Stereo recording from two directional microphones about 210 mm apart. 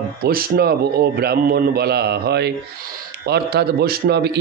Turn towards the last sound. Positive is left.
turn(degrees=-50)  # may be behind; listen again after turning